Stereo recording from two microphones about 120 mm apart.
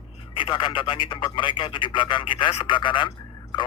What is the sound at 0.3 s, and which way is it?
Speech, 40° left (ahead or behind).